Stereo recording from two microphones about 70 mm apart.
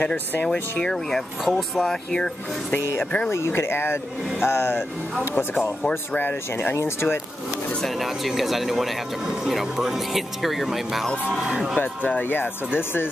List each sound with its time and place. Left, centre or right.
0.7 s speech: centre
3.3 s speech: left
6.7 s speech: left
7.8 s speech: centre
11.8 s speech: left